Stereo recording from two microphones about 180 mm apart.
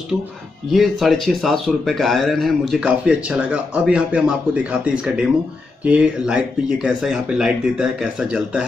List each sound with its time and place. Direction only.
0.7 s speech: centre (ahead or behind)